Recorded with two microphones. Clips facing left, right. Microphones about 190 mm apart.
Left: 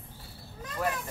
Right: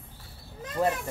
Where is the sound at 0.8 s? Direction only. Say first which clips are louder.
Right 5 dB; 25° right (ahead or behind).